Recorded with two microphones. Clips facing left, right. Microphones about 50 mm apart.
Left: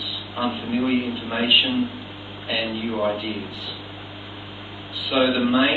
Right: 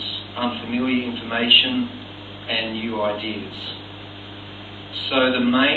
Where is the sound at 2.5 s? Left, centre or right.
Centre.